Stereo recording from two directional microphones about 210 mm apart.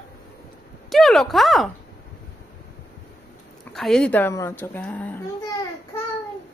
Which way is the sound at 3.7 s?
Centre (ahead or behind).